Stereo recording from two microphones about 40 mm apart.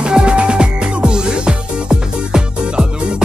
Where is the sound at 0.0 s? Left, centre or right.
Right.